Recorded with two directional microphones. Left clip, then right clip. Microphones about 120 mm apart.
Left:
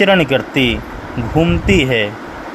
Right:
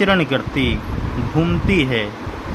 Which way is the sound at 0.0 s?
30° left (ahead or behind).